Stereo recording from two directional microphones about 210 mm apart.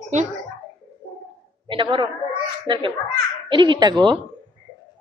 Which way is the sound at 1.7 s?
25° right (ahead or behind).